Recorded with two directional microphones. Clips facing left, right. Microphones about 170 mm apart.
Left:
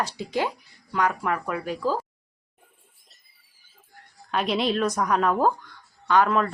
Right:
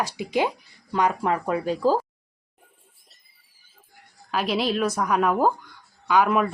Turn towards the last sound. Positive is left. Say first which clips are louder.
# right 1 dB
turn(degrees=-10)  # may be behind; listen again after turning